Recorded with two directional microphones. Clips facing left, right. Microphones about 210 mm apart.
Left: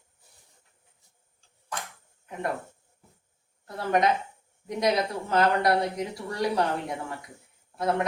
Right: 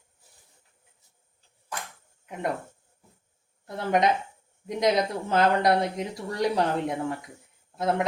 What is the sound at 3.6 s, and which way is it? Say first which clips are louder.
Speech: right 1 dB; 20° right (ahead or behind).